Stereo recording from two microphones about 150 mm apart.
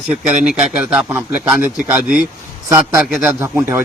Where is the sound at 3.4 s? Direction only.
15° right (ahead or behind).